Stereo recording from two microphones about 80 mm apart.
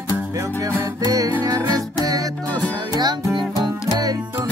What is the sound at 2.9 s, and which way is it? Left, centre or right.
Music, right.